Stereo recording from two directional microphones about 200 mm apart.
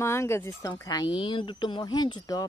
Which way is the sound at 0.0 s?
15° left (ahead or behind).